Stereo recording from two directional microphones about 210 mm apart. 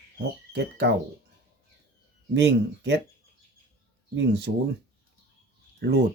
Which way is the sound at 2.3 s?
55° right (ahead or behind).